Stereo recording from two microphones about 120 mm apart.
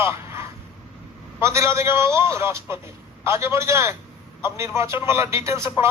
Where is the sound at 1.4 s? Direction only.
25° right (ahead or behind).